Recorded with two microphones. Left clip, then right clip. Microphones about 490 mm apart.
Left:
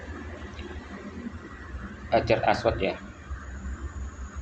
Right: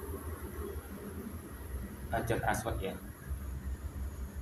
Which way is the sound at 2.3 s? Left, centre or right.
Right.